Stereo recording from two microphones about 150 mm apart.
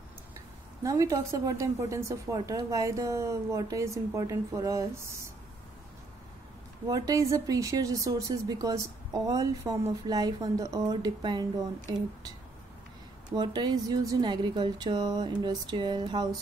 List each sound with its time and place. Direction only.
0.8 s speech: 20° right (ahead or behind)
6.9 s speech: 20° right (ahead or behind)
13.4 s speech: 30° right (ahead or behind)